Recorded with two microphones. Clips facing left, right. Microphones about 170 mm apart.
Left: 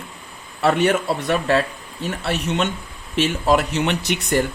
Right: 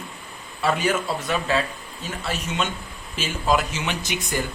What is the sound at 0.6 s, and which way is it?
A man's voice, 65° left (ahead or behind).